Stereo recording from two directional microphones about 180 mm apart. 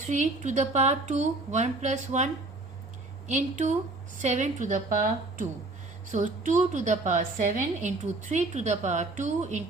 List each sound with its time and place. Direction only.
0.0 s a woman's voice: 45° right (ahead or behind)